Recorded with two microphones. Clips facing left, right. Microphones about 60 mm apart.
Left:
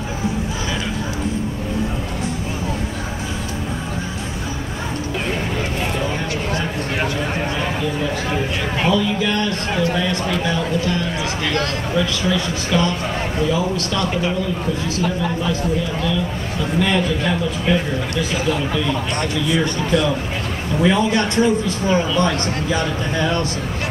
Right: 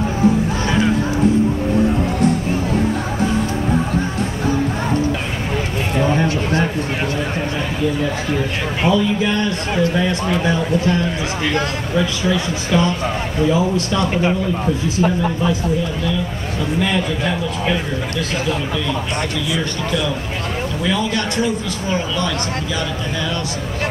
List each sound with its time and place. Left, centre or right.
6.0 s a sound: right
8.8 s a man's voice: centre
11.5 s a man's voice: centre
16.8 s a man's voice: centre
20.8 s a man's voice: left